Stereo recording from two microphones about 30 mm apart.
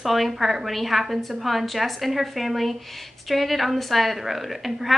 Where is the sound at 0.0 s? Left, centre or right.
Centre.